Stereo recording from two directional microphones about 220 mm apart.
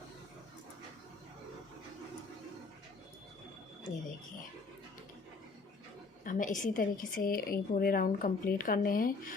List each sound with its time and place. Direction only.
6.2 s a woman's voice: 35° left (ahead or behind)